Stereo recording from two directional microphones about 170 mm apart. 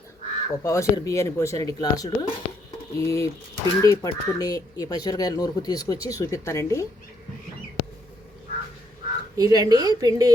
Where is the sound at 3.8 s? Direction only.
20° left (ahead or behind).